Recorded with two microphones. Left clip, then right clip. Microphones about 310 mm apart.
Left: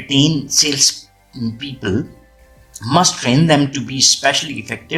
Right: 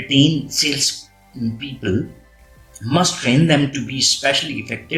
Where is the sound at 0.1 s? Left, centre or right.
Left.